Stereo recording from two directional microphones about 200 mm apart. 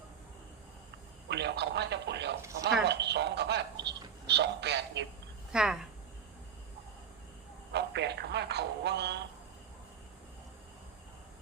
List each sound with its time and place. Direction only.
1.3 s speech: 60° right (ahead or behind)
5.5 s speech: 5° right (ahead or behind)
7.7 s speech: 55° right (ahead or behind)